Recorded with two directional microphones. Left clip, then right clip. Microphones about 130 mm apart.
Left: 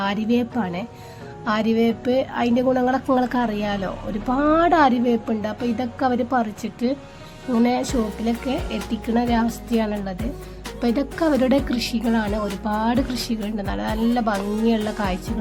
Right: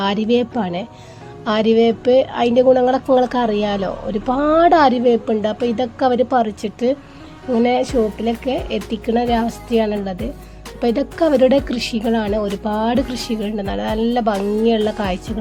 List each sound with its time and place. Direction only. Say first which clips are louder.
0.0 s a woman's voice: right 5 dB; 50° right (ahead or behind)